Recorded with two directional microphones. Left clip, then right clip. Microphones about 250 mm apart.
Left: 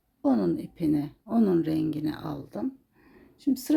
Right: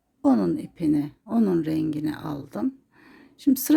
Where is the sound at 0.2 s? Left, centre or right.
Centre.